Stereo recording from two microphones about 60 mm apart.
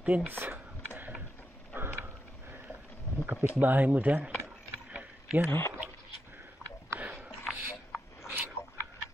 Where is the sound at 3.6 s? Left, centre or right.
Right.